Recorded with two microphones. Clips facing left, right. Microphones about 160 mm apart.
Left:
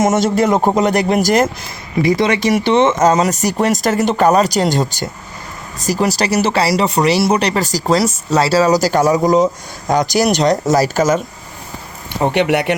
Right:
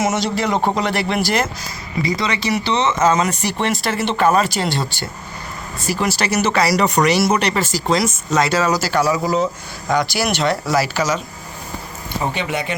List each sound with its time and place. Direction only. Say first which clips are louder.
0.0 s speech: left 6 dB; 45° left (ahead or behind)
12.2 s speech: left 9 dB; 70° left (ahead or behind)